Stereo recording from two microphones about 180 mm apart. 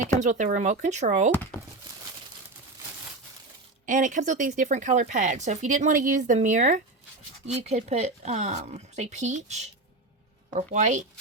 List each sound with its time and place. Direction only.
0.2 s speech: 45° right (ahead or behind)
3.8 s speech: 45° right (ahead or behind)